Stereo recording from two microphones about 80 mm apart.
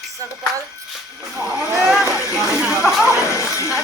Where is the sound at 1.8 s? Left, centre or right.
Centre.